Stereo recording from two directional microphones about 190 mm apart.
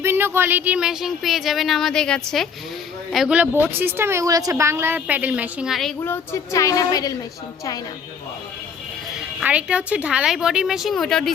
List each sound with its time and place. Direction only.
0.0 s a woman's voice: 10° right (ahead or behind)
6.0 s speech: 15° left (ahead or behind)
9.4 s speech: 5° right (ahead or behind)